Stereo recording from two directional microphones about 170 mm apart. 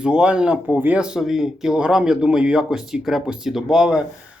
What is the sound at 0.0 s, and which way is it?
Speech, 5° right (ahead or behind).